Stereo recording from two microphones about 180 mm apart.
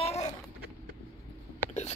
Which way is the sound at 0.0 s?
35° left (ahead or behind).